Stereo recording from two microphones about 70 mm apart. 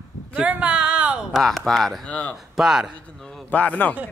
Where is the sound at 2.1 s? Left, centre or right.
Left.